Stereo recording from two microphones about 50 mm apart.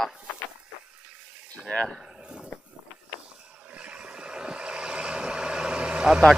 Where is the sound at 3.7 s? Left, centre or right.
Right.